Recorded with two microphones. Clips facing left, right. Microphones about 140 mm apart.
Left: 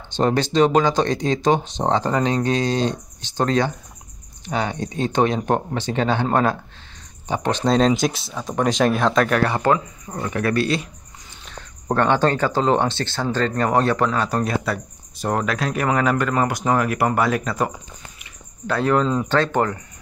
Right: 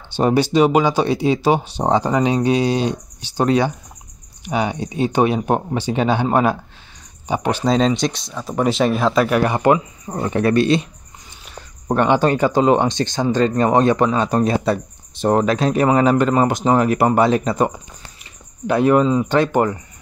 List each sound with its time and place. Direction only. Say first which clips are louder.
0.1 s speech: right 3 dB; 10° right (ahead or behind)
7.6 s speech: left 1 dB; centre (ahead or behind); by 18.3 s 25° right (ahead or behind)
18.7 s speech: right 5 dB; 15° right (ahead or behind)